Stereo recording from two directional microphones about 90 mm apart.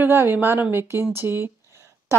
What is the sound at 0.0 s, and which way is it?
A woman's voice, 20° right (ahead or behind).